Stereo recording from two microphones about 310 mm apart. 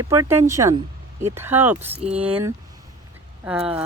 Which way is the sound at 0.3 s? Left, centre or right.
Centre.